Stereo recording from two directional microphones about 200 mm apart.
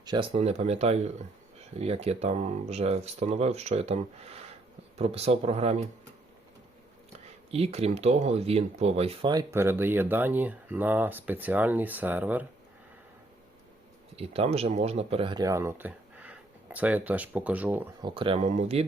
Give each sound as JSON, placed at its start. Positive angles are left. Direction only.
{"t": 0.0, "sound": "speech", "side_deg": -25}
{"t": 7.5, "sound": "speech", "side_deg": -30}
{"t": 14.2, "sound": "speech", "side_deg": -30}
{"t": 18.0, "sound": "speech", "side_deg": -25}